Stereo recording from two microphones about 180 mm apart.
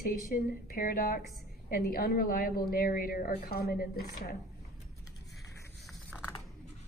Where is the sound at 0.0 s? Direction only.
55° left (ahead or behind).